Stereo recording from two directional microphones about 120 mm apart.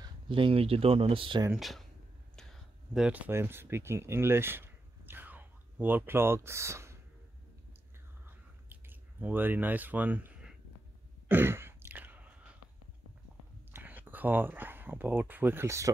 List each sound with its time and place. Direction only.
0.3 s speech: 50° right (ahead or behind)
1.5 s speech: centre (ahead or behind)
2.9 s speech: 10° right (ahead or behind)
8.3 s chewing: 15° right (ahead or behind)
11.2 s sigh: 20° right (ahead or behind)
13.7 s speech: 15° right (ahead or behind)